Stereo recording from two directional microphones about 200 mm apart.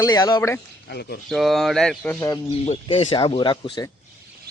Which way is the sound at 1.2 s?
Centre (ahead or behind).